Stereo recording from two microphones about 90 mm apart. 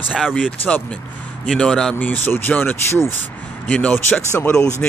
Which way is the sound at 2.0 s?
20° left (ahead or behind).